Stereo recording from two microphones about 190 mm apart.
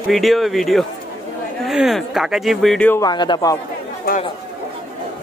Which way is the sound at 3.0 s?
20° left (ahead or behind).